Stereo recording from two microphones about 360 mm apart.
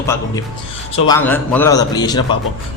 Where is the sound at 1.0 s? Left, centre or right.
Centre.